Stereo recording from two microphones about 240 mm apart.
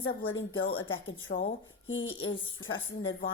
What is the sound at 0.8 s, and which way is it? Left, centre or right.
Speech, left.